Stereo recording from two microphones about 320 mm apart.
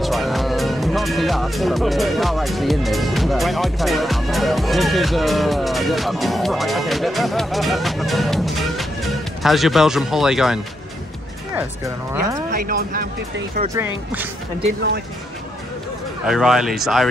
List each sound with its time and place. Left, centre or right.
0.0 s speech: centre
12.1 s speech: centre
12.4 s speech: right
13.7 s speech: centre
16.3 s speech: centre